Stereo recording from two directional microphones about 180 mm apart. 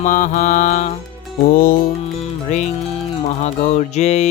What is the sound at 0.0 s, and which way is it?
Mantra, 45° left (ahead or behind).